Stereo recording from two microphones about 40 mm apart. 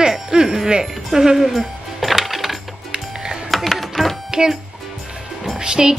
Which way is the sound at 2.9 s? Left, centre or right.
Centre.